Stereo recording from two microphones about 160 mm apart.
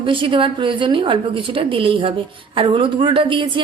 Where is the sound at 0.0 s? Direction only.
30° right (ahead or behind).